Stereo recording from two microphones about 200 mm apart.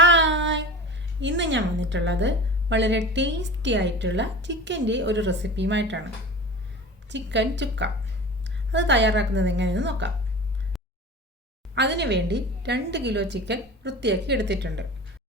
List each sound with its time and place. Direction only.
0.0 s a sound: 65° right (ahead or behind)
3.1 s a woman's voice: 65° right (ahead or behind)
7.1 s a woman's voice: 65° right (ahead or behind)
11.7 s a woman's voice: 60° right (ahead or behind)